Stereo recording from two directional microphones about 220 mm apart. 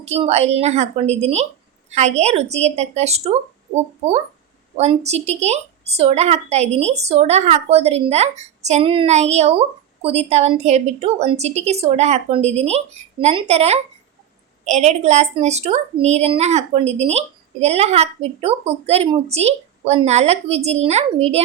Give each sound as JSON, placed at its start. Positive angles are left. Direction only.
{"t": 0.0, "sound": "a woman's voice", "side_deg": -30}
{"t": 4.8, "sound": "a woman's voice", "side_deg": -30}